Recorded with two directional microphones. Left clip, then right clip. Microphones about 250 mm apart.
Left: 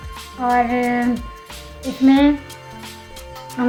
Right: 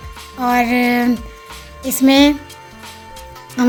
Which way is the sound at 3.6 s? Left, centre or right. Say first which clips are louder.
Right 4 dB; right.